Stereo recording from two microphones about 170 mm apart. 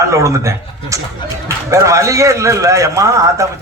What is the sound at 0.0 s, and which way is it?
A man's voice, 20° right (ahead or behind).